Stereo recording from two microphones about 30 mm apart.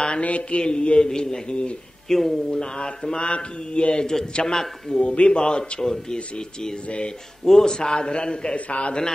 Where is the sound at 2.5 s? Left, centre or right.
Left.